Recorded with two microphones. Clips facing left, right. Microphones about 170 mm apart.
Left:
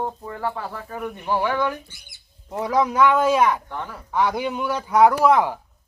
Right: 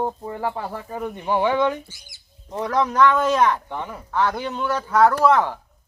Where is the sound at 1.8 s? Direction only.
60° left (ahead or behind).